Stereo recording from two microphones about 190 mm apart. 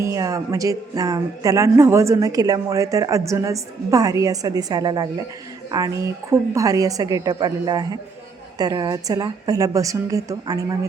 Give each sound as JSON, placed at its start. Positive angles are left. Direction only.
{"t": 0.0, "sound": "speech", "side_deg": -15}
{"t": 6.3, "sound": "a woman's voice", "side_deg": -15}